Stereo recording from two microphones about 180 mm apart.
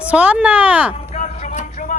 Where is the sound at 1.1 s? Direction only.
35° left (ahead or behind).